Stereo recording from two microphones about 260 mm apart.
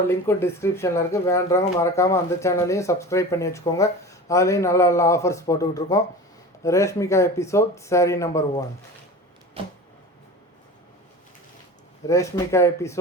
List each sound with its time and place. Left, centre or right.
0.1 s speech: centre
9.6 s a sound: right
12.0 s speech: centre